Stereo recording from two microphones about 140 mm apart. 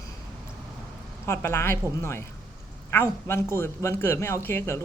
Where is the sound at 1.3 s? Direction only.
20° left (ahead or behind).